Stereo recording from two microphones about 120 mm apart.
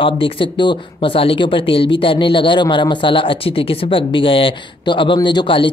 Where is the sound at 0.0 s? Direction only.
45° left (ahead or behind).